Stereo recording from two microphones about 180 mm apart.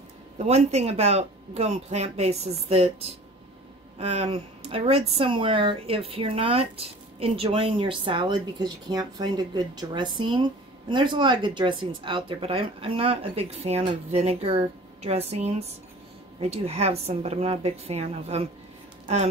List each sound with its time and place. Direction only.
0.4 s speech: 35° right (ahead or behind)
4.0 s speech: 35° right (ahead or behind)